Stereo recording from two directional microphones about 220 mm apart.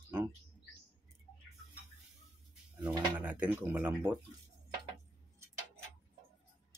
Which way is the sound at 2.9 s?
10° right (ahead or behind).